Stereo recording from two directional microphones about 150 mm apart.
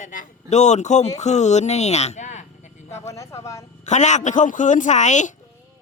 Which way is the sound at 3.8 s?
50° left (ahead or behind).